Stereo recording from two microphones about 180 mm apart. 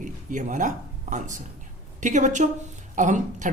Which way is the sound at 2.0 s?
45° right (ahead or behind).